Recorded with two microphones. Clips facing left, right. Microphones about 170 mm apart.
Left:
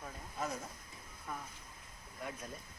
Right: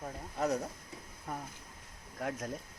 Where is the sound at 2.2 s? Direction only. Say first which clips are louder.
Right 7 dB; 90° right.